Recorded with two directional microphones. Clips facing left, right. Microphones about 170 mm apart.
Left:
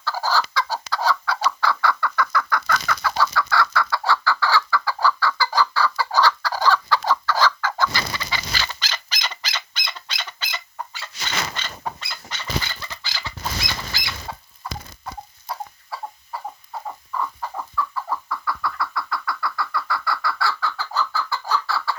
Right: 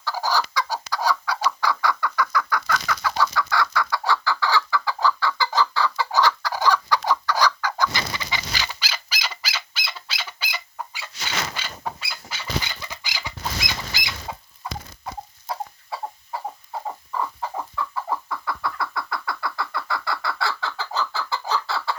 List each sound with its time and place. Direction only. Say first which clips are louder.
0.0 s chicken: left 1 dB; 15° right (ahead or behind)
11.5 s a sound: left 1 dB; 10° right (ahead or behind)
13.0 s bird: even; 15° right (ahead or behind)
13.9 s rodents: even; 15° right (ahead or behind)
17.2 s chicken: even; 20° right (ahead or behind)